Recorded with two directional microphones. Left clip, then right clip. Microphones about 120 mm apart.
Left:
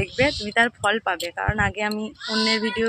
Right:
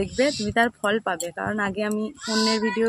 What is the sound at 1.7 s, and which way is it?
Child singing, 45° right (ahead or behind).